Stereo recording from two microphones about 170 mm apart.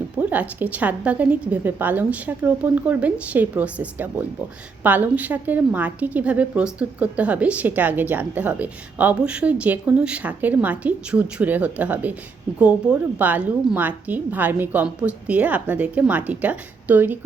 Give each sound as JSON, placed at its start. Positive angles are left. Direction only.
{"t": 0.2, "sound": "a woman's voice", "side_deg": -10}